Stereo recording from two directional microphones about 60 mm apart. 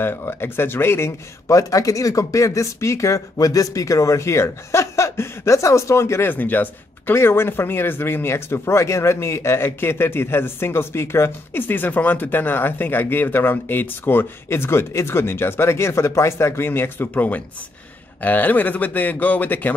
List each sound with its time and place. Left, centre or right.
0.0 s speech: left
1.5 s speech: left
6.2 s speech: left
7.2 s speech: left